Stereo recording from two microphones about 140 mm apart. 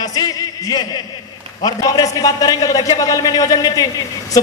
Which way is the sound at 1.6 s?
30° left (ahead or behind).